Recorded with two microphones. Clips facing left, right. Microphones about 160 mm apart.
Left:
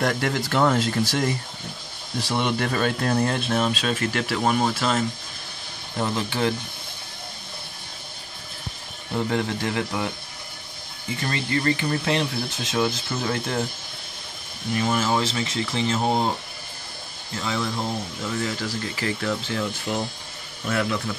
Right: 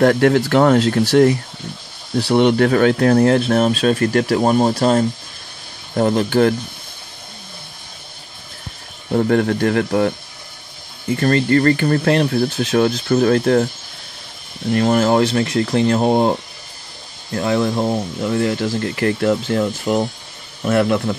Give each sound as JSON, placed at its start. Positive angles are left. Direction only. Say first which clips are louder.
{"t": 0.0, "sound": "speech", "louder": "right 11 dB", "side_deg": -60}
{"t": 5.9, "sound": "speech", "louder": "right 10 dB", "side_deg": -50}
{"t": 9.1, "sound": "speech", "louder": "right 9 dB", "side_deg": -55}
{"t": 14.7, "sound": "speech", "louder": "right 8 dB", "side_deg": -60}